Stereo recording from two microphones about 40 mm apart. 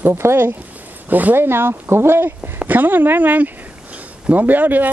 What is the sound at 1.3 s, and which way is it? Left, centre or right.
Speech, right.